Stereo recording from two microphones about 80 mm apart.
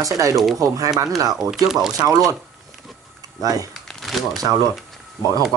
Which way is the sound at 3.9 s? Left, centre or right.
Centre.